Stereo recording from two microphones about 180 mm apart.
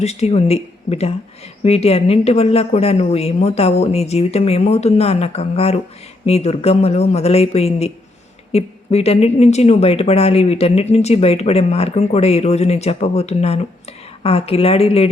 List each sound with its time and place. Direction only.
0.0 s speech: 35° left (ahead or behind)